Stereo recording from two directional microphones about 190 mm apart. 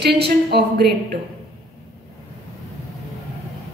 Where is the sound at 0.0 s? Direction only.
60° right (ahead or behind).